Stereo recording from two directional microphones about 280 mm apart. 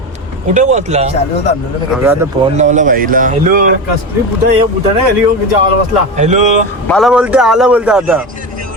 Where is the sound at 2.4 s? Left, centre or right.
Right.